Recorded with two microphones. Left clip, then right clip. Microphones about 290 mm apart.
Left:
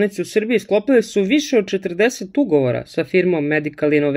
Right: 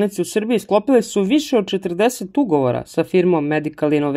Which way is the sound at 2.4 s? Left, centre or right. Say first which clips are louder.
Left 1 dB; centre.